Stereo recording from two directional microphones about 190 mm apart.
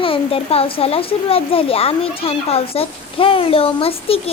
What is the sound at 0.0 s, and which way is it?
A child's voice, 30° left (ahead or behind).